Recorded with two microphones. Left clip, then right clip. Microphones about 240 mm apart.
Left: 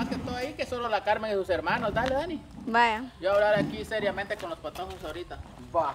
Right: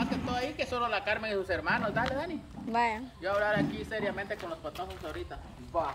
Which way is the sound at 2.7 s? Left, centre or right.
Centre.